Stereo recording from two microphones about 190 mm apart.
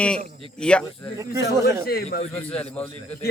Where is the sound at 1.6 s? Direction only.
15° right (ahead or behind).